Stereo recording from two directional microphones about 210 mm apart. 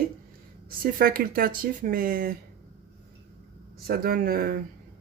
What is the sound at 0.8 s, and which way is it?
Speech, 45° right (ahead or behind).